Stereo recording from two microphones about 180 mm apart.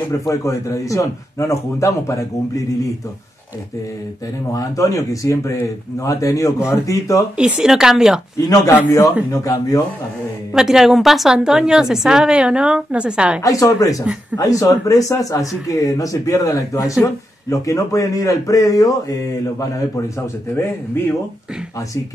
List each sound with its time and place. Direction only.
0.3 s speech: 20° left (ahead or behind)
4.5 s speech: 20° left (ahead or behind)
7.3 s a woman's voice: 5° right (ahead or behind)
8.5 s speech: 15° left (ahead or behind)
10.5 s a woman's voice: 5° right (ahead or behind)
13.4 s speech: 20° left (ahead or behind)
20.5 s speech: 15° left (ahead or behind)